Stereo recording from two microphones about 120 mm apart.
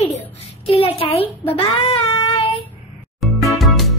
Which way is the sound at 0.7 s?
55° left (ahead or behind).